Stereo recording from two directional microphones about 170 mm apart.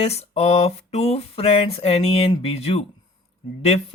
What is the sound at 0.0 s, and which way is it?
Speech, 40° left (ahead or behind).